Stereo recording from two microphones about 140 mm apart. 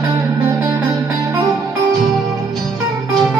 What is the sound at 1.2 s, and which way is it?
Music, 25° right (ahead or behind).